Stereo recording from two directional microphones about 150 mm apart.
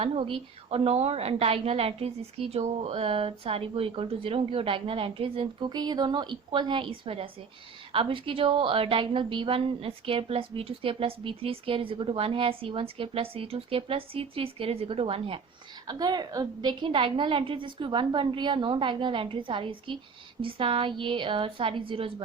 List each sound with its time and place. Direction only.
0.0 s a woman's voice: 40° right (ahead or behind)
15.9 s a woman's voice: 25° right (ahead or behind)